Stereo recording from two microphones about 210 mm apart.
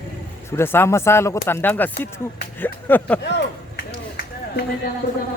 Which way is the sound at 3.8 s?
50° left (ahead or behind).